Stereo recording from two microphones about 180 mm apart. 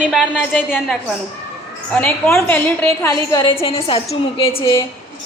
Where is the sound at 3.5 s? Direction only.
30° left (ahead or behind).